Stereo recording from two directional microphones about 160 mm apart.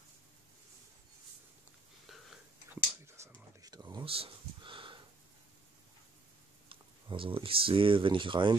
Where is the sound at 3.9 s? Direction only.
35° right (ahead or behind).